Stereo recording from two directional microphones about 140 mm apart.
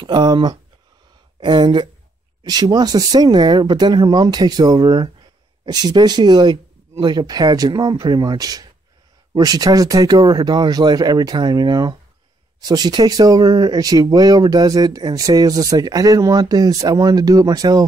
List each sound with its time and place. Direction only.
0.0 s speech: 30° right (ahead or behind)